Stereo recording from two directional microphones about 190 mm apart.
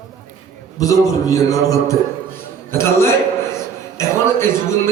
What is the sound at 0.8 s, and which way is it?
A man's voice, 20° left (ahead or behind).